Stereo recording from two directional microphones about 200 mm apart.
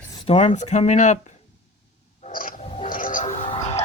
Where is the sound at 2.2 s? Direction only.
40° left (ahead or behind).